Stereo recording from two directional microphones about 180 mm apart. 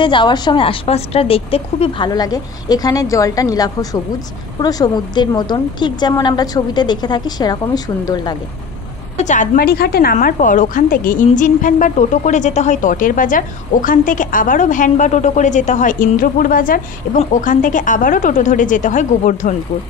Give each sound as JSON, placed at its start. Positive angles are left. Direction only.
{"t": 0.0, "sound": "a woman's voice", "side_deg": 25}
{"t": 9.2, "sound": "a woman's voice", "side_deg": 45}
{"t": 9.6, "sound": "a woman's voice", "side_deg": 60}